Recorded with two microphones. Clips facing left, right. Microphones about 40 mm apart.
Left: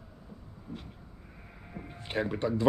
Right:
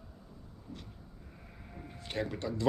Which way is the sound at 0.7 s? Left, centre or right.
Left.